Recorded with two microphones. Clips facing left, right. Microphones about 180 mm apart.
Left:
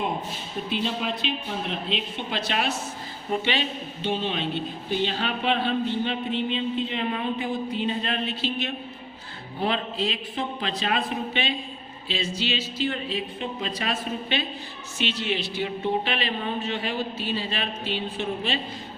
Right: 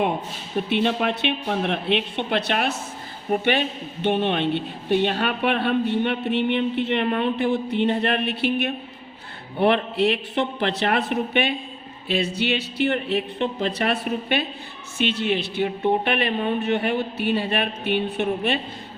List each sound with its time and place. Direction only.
0.7 s a man's voice: 70° right (ahead or behind)